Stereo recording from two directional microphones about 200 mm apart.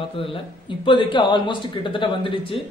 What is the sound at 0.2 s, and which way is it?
Speech, 25° left (ahead or behind).